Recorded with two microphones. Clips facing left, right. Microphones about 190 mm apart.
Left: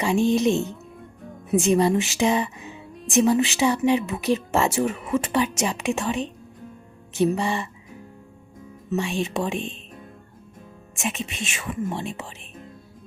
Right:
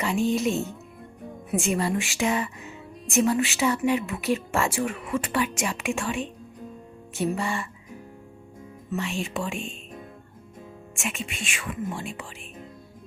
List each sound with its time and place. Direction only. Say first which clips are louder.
0.0 s a woman's voice: left 4 dB; 15° left (ahead or behind)
7.2 s speech: left 5 dB; 15° left (ahead or behind)
8.9 s a woman's voice: left 4 dB; 15° left (ahead or behind)
10.9 s a woman's voice: left 4 dB; 20° left (ahead or behind)